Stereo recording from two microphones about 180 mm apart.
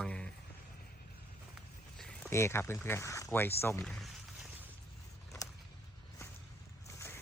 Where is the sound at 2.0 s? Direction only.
5° left (ahead or behind).